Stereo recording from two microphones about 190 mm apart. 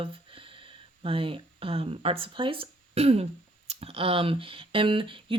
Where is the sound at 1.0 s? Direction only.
30° right (ahead or behind).